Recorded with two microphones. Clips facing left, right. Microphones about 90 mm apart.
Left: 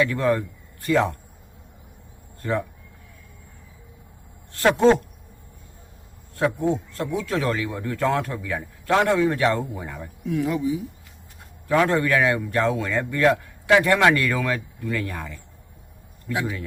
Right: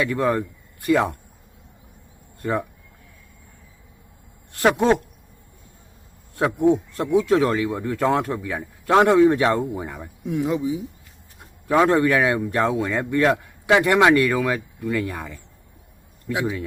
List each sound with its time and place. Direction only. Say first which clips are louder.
0.0 s speech: even; 10° right (ahead or behind)
2.4 s speech: right 1 dB; 15° right (ahead or behind)
6.3 s a man's voice: right 4 dB; 15° right (ahead or behind)